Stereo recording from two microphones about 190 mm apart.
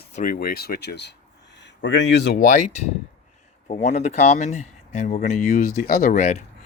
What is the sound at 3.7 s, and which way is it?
Speech, 35° left (ahead or behind).